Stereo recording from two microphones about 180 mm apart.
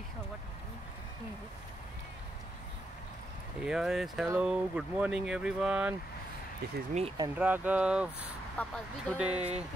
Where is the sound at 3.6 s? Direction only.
Centre (ahead or behind).